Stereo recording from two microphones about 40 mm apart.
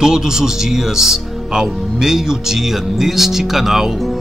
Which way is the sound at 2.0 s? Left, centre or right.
Centre.